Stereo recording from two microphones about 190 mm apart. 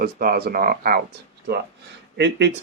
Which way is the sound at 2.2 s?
65° right (ahead or behind).